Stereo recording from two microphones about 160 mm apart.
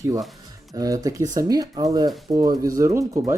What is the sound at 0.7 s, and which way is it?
Speech, 20° right (ahead or behind).